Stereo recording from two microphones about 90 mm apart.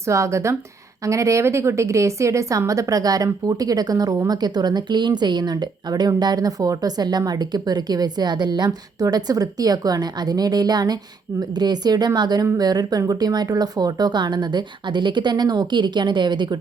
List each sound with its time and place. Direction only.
0.0 s a woman's voice: 35° right (ahead or behind); by 16.6 s 55° right (ahead or behind)